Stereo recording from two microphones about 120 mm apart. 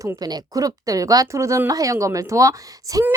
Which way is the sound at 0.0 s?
35° right (ahead or behind).